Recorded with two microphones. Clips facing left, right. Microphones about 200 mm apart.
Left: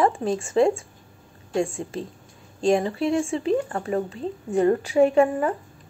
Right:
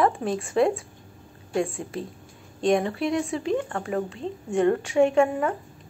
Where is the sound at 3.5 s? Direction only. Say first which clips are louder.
Left 2 dB; 5° left (ahead or behind).